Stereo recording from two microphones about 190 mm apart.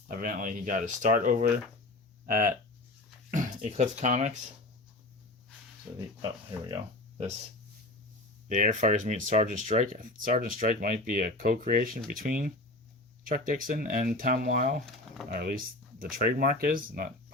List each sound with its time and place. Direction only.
0.1 s speech: 50° right (ahead or behind)
5.9 s speech: 10° right (ahead or behind)
8.4 s speech: 40° right (ahead or behind)